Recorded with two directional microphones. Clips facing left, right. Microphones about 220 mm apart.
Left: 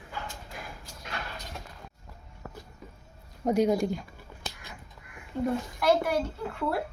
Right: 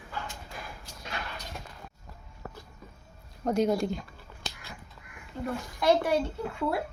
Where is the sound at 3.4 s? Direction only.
15° left (ahead or behind).